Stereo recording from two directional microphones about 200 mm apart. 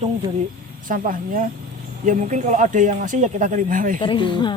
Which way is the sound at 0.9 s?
45° right (ahead or behind).